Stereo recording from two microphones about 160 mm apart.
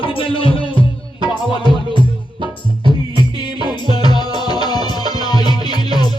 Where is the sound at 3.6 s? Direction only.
25° left (ahead or behind).